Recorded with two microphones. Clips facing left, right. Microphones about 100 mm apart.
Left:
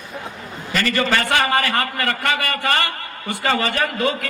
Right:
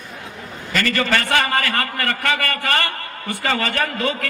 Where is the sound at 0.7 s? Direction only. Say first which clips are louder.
Even; 25° left (ahead or behind).